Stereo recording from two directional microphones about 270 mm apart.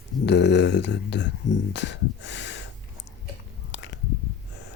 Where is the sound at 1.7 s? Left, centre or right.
Left.